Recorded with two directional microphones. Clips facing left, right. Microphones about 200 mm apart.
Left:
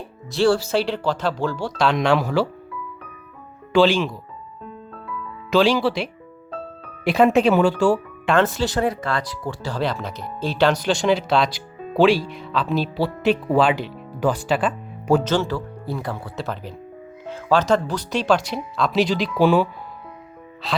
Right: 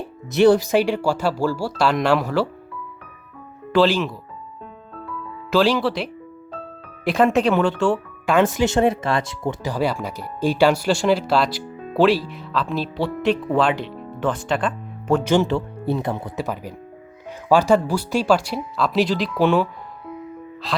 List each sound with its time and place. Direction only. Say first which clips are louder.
0.3 s speech: right 4 dB; 20° right (ahead or behind); by 2.5 s centre (ahead or behind)
3.7 s speech: left 1 dB; centre (ahead or behind)
5.5 s speech: left 1 dB; centre (ahead or behind)
8.5 s speech: right 4 dB; 25° right (ahead or behind); by 15.2 s 5° left (ahead or behind)
15.2 s speech: right 4 dB; 15° right (ahead or behind); by 19.6 s centre (ahead or behind)
20.6 s speech: left 1 dB; centre (ahead or behind)